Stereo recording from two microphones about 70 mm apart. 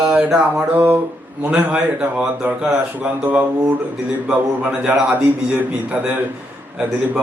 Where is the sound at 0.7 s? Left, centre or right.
Right.